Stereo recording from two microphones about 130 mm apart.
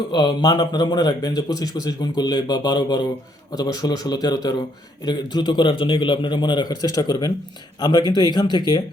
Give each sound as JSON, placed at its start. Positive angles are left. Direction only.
{"t": 0.1, "sound": "speech", "side_deg": 35}